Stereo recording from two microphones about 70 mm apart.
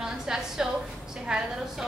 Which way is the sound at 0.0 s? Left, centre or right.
Centre.